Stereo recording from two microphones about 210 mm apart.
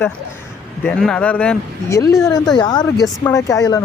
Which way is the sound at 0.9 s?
5° left (ahead or behind).